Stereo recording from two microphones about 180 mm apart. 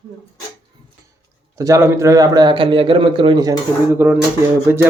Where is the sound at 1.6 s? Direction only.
15° right (ahead or behind).